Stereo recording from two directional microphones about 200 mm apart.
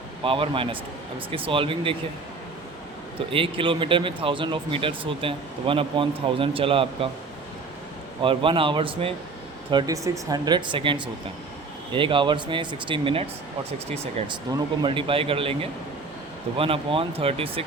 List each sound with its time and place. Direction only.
0.3 s speech: 25° right (ahead or behind)
3.2 s speech: 25° right (ahead or behind)
8.2 s speech: 25° right (ahead or behind)